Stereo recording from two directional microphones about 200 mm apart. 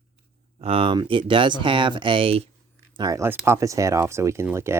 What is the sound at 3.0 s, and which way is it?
Speech, 15° right (ahead or behind).